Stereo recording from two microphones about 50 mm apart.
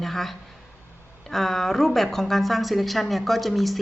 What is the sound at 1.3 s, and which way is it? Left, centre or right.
Speech, centre.